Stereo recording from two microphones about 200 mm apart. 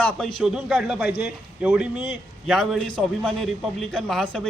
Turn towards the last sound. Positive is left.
turn(degrees=5)  # may be behind; listen again after turning